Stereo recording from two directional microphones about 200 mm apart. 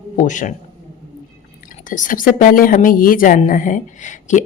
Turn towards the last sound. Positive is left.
turn(degrees=40)  # may be behind; listen again after turning